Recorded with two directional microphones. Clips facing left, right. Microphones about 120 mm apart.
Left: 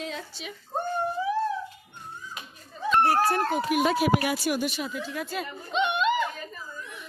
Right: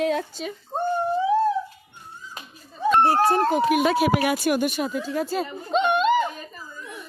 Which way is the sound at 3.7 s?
75° right (ahead or behind).